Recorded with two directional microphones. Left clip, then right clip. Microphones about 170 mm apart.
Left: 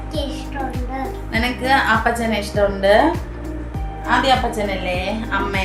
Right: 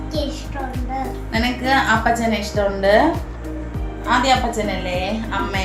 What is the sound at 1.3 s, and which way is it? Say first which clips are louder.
A woman's voice: left 1 dB; 20° left (ahead or behind).